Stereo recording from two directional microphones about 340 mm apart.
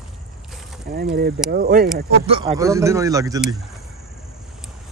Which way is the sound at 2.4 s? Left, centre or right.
Centre.